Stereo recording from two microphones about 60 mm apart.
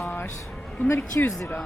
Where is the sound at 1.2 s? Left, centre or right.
Left.